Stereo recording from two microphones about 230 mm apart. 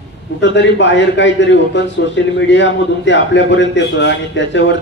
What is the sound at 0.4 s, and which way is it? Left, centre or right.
A man's voice, left.